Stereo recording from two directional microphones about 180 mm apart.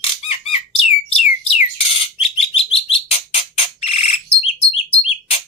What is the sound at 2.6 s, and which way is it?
Bird, 35° left (ahead or behind).